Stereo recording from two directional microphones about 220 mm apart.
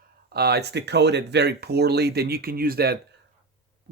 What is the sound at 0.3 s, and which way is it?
Speech, 45° right (ahead or behind).